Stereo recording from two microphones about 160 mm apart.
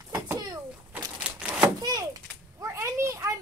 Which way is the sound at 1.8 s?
25° right (ahead or behind).